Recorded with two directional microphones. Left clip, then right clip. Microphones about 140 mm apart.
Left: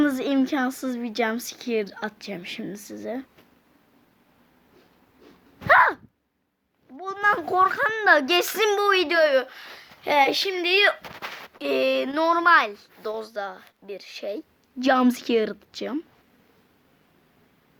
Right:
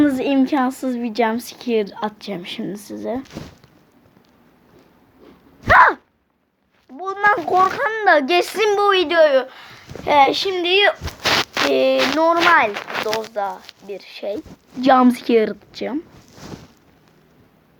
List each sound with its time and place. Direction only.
0.0 s a woman's voice: 15° left (ahead or behind)
5.7 s a sound: 20° left (ahead or behind)
6.9 s a child's voice: 30° left (ahead or behind)
10.0 s a woman's voice: 10° left (ahead or behind); by 16.0 s 25° left (ahead or behind)